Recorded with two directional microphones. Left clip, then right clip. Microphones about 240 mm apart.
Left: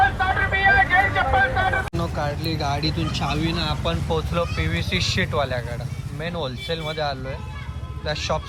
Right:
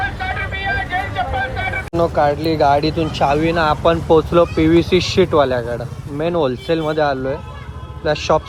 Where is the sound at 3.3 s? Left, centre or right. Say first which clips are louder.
Right 12 dB; centre.